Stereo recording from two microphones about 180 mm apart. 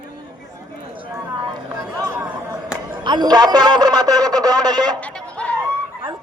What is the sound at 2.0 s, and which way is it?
Chatter, 15° right (ahead or behind).